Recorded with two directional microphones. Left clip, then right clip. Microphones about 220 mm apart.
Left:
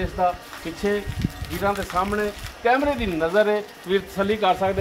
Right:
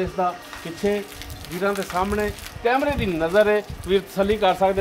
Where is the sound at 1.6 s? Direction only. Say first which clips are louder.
Even; 45° right (ahead or behind).